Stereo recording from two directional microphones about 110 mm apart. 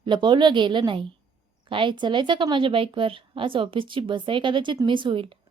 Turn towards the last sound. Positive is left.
turn(degrees=-50)  # may be behind; listen again after turning